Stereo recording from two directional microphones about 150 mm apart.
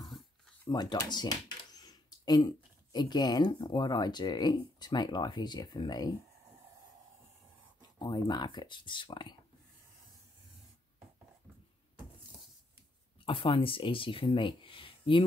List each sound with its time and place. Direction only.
0.7 s speech: 30° left (ahead or behind)
8.0 s speech: 30° left (ahead or behind)
13.2 s speech: 35° left (ahead or behind)